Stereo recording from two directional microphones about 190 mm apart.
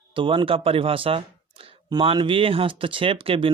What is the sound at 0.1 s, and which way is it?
Speech, 25° right (ahead or behind).